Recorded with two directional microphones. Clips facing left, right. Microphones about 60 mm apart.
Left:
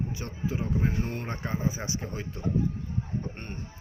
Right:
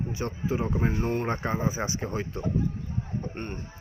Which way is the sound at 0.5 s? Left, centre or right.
Right.